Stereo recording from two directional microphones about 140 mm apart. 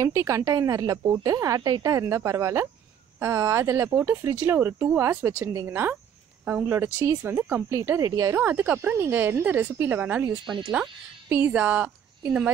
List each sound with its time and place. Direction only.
0.0 s a woman's voice: 20° right (ahead or behind); by 10.9 s 5° right (ahead or behind)
11.2 s a woman's voice: 15° right (ahead or behind)